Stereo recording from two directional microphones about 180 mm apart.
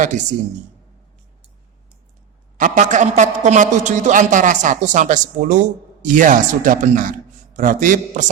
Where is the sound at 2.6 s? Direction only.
45° right (ahead or behind).